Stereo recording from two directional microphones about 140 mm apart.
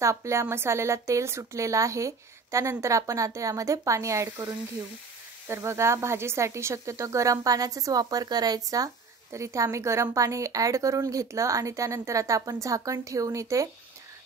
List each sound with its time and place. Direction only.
0.0 s speech: 20° right (ahead or behind)